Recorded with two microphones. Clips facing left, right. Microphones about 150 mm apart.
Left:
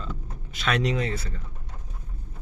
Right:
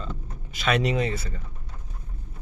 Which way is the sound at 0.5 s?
5° right (ahead or behind).